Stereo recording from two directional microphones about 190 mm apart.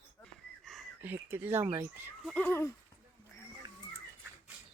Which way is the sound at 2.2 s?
5° left (ahead or behind).